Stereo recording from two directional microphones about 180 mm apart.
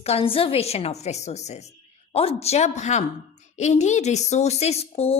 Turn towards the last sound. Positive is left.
turn(degrees=35)  # may be behind; listen again after turning